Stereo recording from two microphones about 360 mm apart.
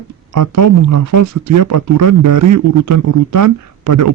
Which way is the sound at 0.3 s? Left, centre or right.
Right.